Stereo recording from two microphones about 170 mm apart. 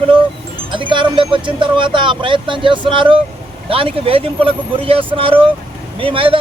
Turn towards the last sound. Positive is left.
turn(degrees=-30)  # may be behind; listen again after turning